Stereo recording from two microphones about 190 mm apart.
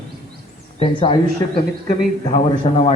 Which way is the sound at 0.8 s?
30° left (ahead or behind).